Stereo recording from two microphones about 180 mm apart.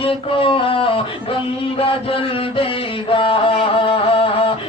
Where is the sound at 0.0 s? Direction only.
30° left (ahead or behind).